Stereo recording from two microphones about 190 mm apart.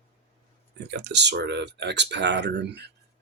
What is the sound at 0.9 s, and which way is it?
Speech, 65° right (ahead or behind).